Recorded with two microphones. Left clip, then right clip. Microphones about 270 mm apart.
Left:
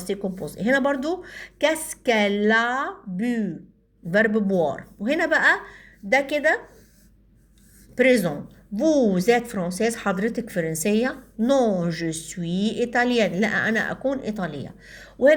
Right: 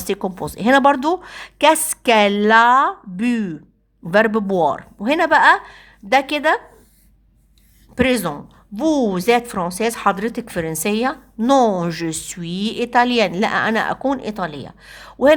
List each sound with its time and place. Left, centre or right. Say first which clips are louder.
0.0 s speech: right 6 dB; right
7.9 s a woman's voice: even; centre
11.5 s speech: right 6 dB; right
11.8 s a woman's voice: right 4 dB; right